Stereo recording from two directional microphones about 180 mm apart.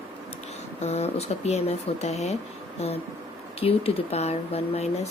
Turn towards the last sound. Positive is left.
turn(degrees=35)  # may be behind; listen again after turning